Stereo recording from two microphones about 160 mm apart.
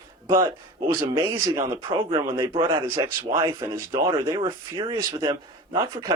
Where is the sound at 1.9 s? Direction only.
35° right (ahead or behind).